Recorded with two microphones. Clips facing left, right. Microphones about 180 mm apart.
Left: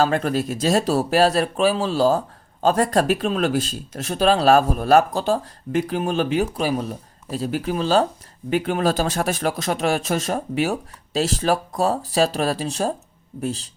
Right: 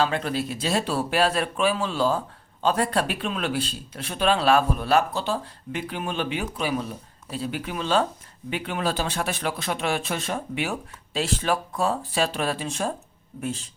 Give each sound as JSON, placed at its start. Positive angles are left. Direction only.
{"t": 0.0, "sound": "speech", "side_deg": 45}